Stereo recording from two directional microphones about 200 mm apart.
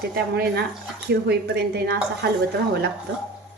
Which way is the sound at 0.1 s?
50° right (ahead or behind).